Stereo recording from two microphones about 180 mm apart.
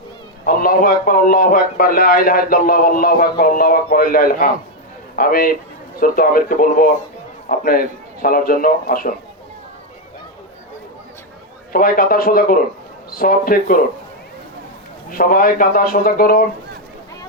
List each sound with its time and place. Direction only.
0.4 s a man's voice: 50° left (ahead or behind)
11.7 s a man's voice: 55° left (ahead or behind)
15.1 s a man's voice: 55° left (ahead or behind)